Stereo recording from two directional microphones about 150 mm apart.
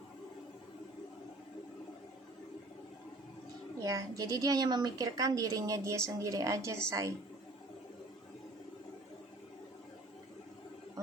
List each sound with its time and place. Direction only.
3.8 s a woman's voice: 20° right (ahead or behind)